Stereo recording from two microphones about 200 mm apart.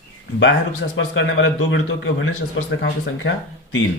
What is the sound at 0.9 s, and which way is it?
A man's voice, 70° left (ahead or behind).